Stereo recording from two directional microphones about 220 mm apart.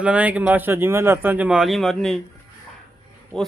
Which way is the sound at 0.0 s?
5° right (ahead or behind).